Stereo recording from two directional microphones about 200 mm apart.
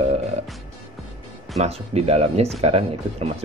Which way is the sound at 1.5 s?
30° right (ahead or behind).